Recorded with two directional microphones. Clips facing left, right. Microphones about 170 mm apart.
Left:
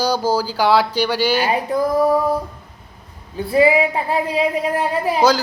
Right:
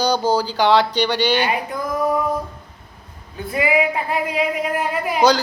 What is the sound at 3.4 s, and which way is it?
Speech, 30° left (ahead or behind).